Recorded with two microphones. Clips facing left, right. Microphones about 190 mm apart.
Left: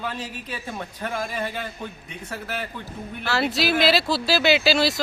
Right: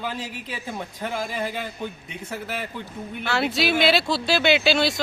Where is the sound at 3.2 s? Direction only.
Centre (ahead or behind).